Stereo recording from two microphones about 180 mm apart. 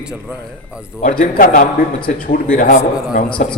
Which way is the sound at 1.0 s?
50° left (ahead or behind).